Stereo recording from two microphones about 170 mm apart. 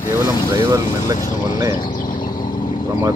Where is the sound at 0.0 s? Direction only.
20° left (ahead or behind).